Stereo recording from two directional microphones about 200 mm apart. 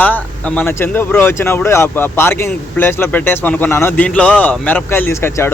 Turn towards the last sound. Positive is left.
turn(degrees=10)  # may be behind; listen again after turning